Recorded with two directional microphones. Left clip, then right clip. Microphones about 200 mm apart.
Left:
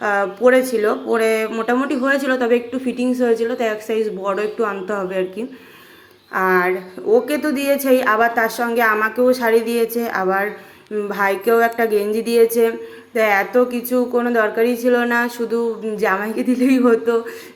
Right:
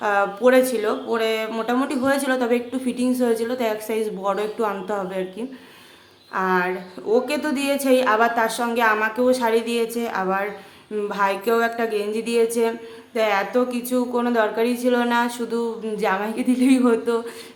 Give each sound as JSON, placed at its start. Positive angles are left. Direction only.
{"t": 0.0, "sound": "speech", "side_deg": 10}